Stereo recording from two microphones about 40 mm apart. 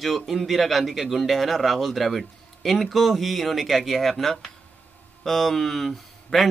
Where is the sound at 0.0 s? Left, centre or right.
Centre.